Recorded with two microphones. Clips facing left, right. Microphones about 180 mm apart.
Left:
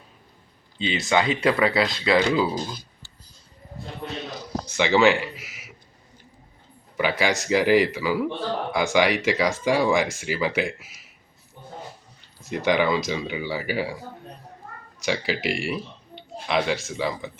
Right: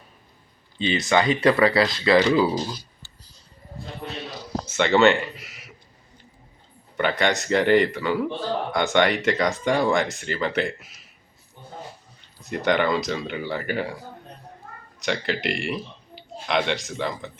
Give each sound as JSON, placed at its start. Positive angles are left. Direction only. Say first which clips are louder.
{"t": 0.9, "sound": "speech", "louder": "right 1 dB", "side_deg": 0}
{"t": 4.8, "sound": "speech", "louder": "right 1 dB", "side_deg": 0}
{"t": 6.9, "sound": "speech", "louder": "right 1 dB", "side_deg": 5}
{"t": 12.4, "sound": "speech", "louder": "even", "side_deg": 0}